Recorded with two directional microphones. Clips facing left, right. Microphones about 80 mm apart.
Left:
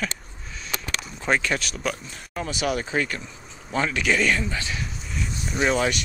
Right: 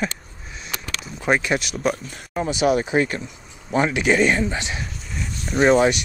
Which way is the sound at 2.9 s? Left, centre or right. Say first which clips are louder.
Right 5 dB; right.